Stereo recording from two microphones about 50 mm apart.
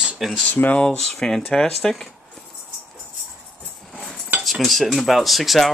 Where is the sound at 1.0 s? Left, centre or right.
Centre.